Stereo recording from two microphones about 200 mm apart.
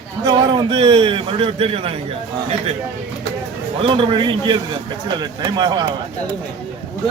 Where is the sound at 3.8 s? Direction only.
25° right (ahead or behind).